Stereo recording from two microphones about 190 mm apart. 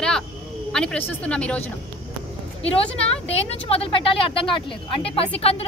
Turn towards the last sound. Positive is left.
turn(degrees=30)  # may be behind; listen again after turning